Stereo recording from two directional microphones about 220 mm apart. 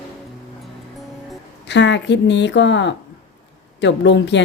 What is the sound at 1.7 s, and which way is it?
A woman's voice, 55° left (ahead or behind).